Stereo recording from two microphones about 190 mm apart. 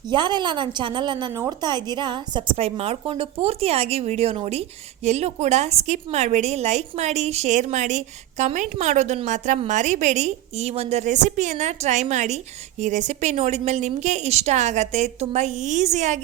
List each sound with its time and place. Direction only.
0.1 s a woman's voice: 25° right (ahead or behind)